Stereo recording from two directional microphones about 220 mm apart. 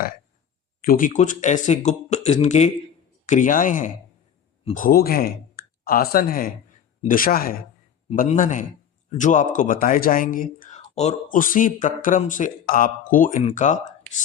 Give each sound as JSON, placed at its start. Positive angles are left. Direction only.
{"t": 0.8, "sound": "speech", "side_deg": 40}